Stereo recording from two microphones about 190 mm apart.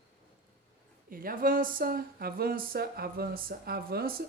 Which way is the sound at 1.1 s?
50° right (ahead or behind).